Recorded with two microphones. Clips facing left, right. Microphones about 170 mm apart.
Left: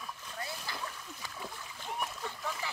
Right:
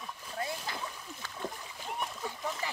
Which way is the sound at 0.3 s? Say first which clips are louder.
Right 6 dB; 25° right (ahead or behind).